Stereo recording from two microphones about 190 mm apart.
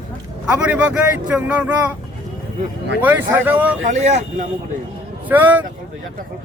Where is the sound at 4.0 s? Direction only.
35° right (ahead or behind).